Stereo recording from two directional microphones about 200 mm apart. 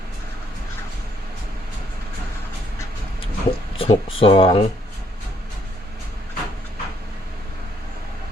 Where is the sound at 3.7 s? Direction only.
25° left (ahead or behind).